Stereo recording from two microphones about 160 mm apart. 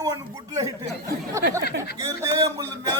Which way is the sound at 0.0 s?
25° right (ahead or behind).